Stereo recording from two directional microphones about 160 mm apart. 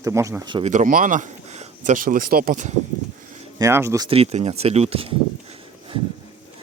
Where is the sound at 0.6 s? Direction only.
50° right (ahead or behind).